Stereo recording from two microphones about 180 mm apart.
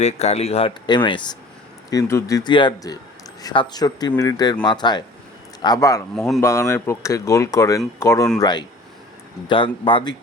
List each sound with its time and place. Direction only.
0.0 s speech: 35° left (ahead or behind); by 6.0 s 20° left (ahead or behind)
6.1 s speech: centre (ahead or behind)
6.4 s speech: 15° left (ahead or behind)